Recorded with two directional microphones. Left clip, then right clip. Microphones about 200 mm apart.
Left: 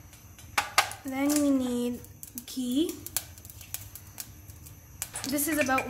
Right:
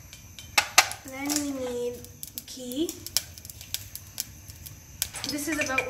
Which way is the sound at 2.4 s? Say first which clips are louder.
Left 4 dB; 55° left (ahead or behind).